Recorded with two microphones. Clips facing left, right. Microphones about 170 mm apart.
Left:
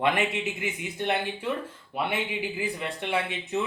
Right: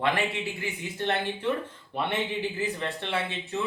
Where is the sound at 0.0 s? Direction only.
20° left (ahead or behind).